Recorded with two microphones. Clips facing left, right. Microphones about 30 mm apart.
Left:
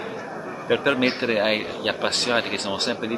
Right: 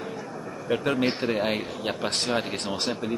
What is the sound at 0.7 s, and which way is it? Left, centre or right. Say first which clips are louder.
Speech: left 4 dB; left.